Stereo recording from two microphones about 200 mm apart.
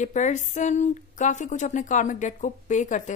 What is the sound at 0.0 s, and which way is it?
A woman's voice, 35° left (ahead or behind).